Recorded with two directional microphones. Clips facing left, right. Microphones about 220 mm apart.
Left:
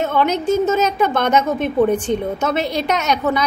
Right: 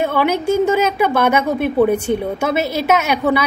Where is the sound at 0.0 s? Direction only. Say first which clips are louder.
Right 1 dB; 10° right (ahead or behind).